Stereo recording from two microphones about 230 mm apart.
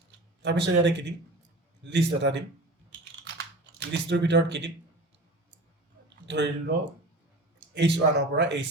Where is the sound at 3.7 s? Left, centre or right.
Right.